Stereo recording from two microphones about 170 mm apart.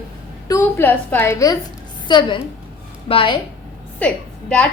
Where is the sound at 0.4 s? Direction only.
15° left (ahead or behind).